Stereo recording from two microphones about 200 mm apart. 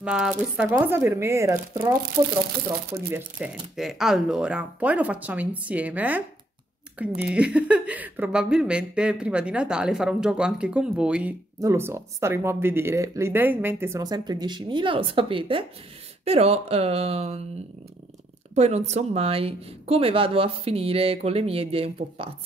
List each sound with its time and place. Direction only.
0.0 s speech: 5° right (ahead or behind); by 17.4 s 30° right (ahead or behind)
18.5 s speech: 35° right (ahead or behind)